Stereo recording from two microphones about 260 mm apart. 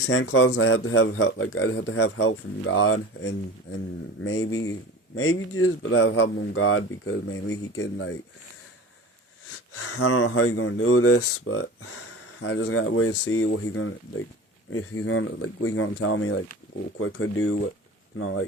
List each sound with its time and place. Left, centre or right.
0.0 s speech: left
9.7 s speech: left